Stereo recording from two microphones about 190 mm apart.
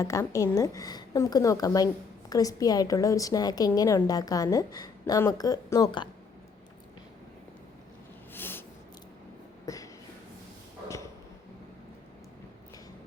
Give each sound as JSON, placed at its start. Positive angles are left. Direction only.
{"t": 0.0, "sound": "a woman's voice", "side_deg": 15}
{"t": 8.3, "sound": "snort", "side_deg": 10}
{"t": 9.6, "sound": "a sound", "side_deg": 15}